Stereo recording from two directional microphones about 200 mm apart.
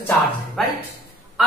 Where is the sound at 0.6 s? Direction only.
Centre (ahead or behind).